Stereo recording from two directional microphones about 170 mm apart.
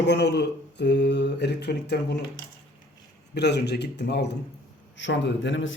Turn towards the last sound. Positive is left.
turn(degrees=90)